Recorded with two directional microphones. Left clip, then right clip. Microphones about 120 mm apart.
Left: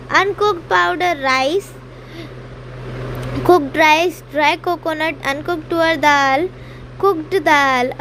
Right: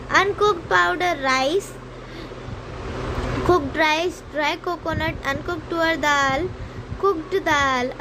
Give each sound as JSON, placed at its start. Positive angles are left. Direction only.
{"t": 0.1, "sound": "speech", "side_deg": 55}
{"t": 3.4, "sound": "speech", "side_deg": 50}